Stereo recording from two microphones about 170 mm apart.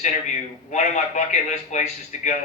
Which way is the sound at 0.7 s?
45° left (ahead or behind).